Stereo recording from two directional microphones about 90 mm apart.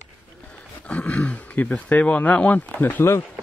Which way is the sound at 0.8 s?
15° left (ahead or behind).